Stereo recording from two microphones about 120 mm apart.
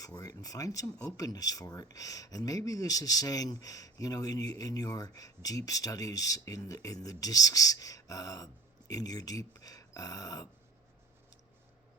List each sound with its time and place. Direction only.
0.0 s speech: 30° left (ahead or behind)